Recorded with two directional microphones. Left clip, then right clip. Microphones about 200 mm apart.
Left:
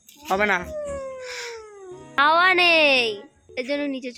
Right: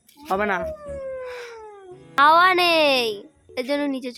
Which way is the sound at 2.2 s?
15° right (ahead or behind).